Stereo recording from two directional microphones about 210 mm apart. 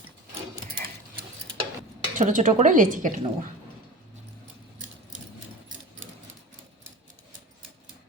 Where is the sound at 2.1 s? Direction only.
35° right (ahead or behind).